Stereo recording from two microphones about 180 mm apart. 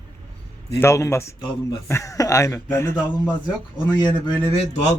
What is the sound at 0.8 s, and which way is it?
A man's voice, 15° left (ahead or behind).